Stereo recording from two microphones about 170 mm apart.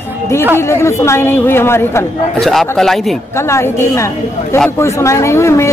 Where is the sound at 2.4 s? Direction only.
Centre (ahead or behind).